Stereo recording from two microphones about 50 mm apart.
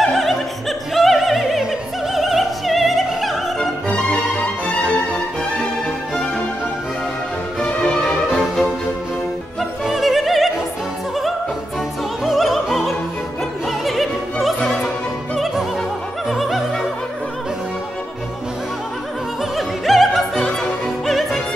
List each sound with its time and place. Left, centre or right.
0.0 s opera: centre
4.6 s music: left
7.8 s music: centre
8.3 s music: centre
9.6 s opera: centre
12.3 s opera: centre
16.3 s music: centre
19.5 s opera: centre